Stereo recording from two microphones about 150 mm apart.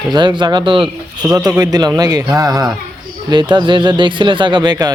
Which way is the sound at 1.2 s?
10° right (ahead or behind).